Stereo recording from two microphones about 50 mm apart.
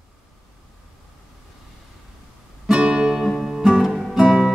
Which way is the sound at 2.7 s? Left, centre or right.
Centre.